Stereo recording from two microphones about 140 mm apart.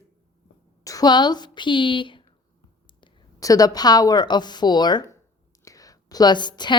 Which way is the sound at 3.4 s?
25° left (ahead or behind).